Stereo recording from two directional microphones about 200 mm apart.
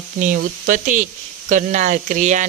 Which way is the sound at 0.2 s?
40° right (ahead or behind).